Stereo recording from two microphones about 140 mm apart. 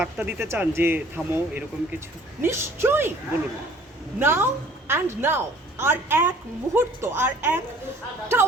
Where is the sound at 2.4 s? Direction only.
15° right (ahead or behind).